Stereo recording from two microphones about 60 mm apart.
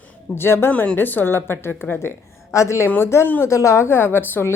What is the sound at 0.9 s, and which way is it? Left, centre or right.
A woman's voice, left.